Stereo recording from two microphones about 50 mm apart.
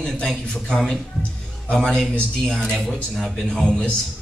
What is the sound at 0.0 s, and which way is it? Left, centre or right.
A man's voice, centre.